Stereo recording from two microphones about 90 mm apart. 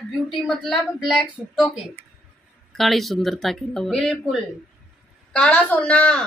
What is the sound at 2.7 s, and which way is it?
A woman's voice, centre (ahead or behind).